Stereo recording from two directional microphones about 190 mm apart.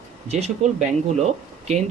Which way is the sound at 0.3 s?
35° right (ahead or behind).